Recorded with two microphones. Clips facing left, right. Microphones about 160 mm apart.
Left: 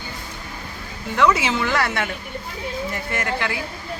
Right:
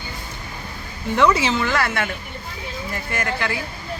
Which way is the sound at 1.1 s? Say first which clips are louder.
Right 1 dB; centre (ahead or behind).